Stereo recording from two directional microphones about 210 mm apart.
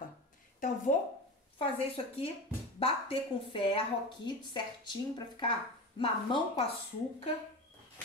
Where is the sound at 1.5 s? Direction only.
25° left (ahead or behind).